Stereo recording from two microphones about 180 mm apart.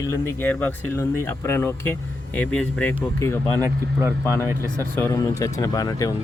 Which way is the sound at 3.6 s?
15° right (ahead or behind).